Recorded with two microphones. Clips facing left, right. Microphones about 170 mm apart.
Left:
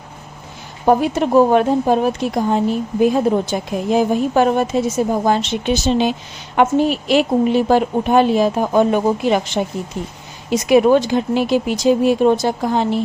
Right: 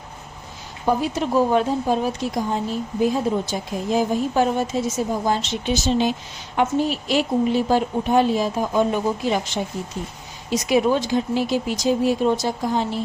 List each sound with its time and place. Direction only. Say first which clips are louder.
0.9 s a woman's voice: left 6 dB; 60° left (ahead or behind)